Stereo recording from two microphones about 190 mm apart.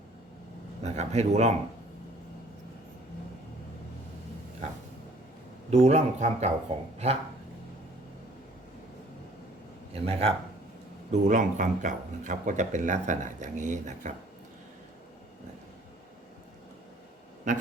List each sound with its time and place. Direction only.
0.9 s speech: 35° right (ahead or behind)
5.7 s speech: 35° right (ahead or behind)
9.9 s speech: 30° right (ahead or behind)